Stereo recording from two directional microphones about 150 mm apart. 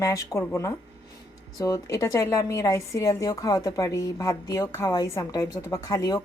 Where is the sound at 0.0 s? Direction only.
20° left (ahead or behind).